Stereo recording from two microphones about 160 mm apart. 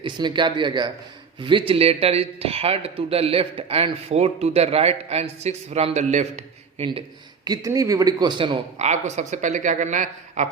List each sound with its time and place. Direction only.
0.0 s a man's voice: 30° right (ahead or behind); by 6.8 s 45° right (ahead or behind)
7.4 s a man's voice: 25° right (ahead or behind)
8.8 s speech: 45° right (ahead or behind)